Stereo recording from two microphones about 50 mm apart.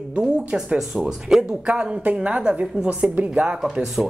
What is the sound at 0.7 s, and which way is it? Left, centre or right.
Speech, centre.